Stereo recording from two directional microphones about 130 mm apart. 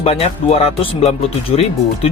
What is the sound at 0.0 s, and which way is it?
Speech, 50° left (ahead or behind).